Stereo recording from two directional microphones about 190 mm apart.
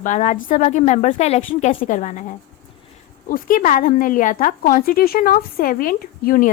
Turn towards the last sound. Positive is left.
turn(degrees=50)  # may be behind; listen again after turning